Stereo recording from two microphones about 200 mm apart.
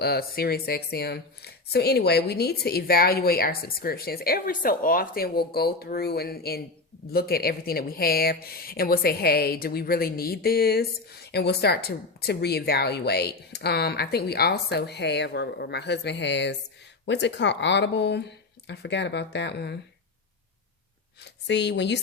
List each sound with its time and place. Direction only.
0.0 s speech: 50° left (ahead or behind)
21.2 s speech: 60° left (ahead or behind)